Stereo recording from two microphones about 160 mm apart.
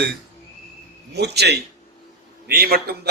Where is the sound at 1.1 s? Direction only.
90° right.